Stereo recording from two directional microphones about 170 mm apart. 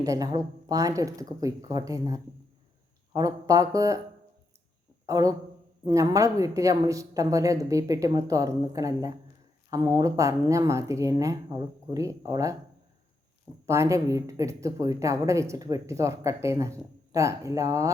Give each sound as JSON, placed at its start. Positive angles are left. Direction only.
{"t": 0.0, "sound": "speech", "side_deg": -20}
{"t": 5.0, "sound": "speech", "side_deg": -20}
{"t": 13.7, "sound": "speech", "side_deg": -20}